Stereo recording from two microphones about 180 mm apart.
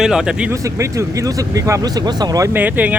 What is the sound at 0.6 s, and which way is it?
Speech, 15° right (ahead or behind).